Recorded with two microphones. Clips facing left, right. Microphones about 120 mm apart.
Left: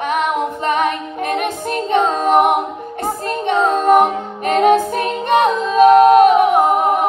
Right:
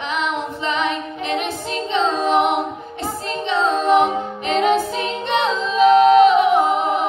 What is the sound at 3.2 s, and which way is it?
Music, 50° left (ahead or behind).